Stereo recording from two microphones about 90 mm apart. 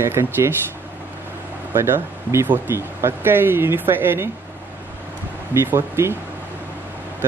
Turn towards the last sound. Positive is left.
turn(degrees=-30)  # may be behind; listen again after turning